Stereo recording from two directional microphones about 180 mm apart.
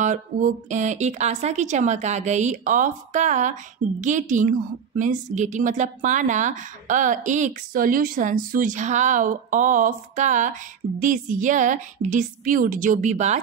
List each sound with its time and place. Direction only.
0.0 s a woman's voice: 45° right (ahead or behind)